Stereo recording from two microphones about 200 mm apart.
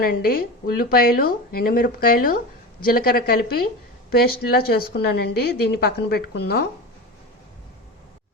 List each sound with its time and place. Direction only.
0.0 s a woman's voice: 50° left (ahead or behind)